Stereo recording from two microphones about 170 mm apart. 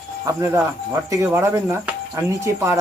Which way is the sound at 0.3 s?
15° right (ahead or behind).